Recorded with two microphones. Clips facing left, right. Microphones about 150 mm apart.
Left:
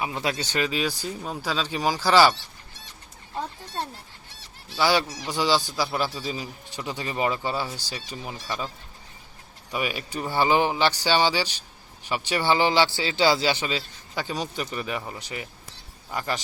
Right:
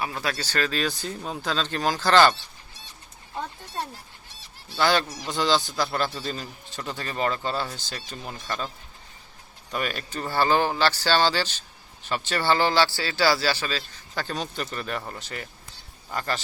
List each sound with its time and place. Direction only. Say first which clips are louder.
0.0 s a man's voice: left 2 dB; 20° left (ahead or behind)
4.7 s a man's voice: even; 10° left (ahead or behind)
9.7 s a man's voice: left 1 dB; 10° left (ahead or behind)